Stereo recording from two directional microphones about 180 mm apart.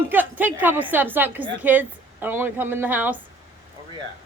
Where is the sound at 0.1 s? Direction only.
10° right (ahead or behind).